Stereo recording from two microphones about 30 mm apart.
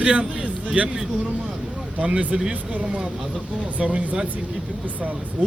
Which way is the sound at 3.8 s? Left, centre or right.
Right.